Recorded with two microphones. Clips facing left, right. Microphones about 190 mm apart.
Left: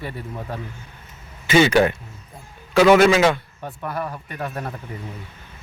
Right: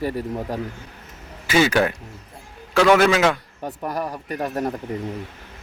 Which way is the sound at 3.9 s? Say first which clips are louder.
Right 1 dB; 35° right (ahead or behind).